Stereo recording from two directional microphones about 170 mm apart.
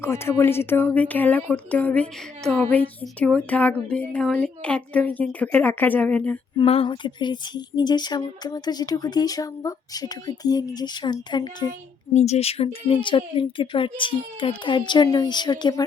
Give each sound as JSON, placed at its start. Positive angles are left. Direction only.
{"t": 0.0, "sound": "speech", "side_deg": 15}
{"t": 6.6, "sound": "a woman's voice", "side_deg": 30}
{"t": 12.1, "sound": "a woman's voice", "side_deg": 40}